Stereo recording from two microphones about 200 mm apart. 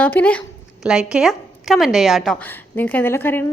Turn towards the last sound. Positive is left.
turn(degrees=10)  # may be behind; listen again after turning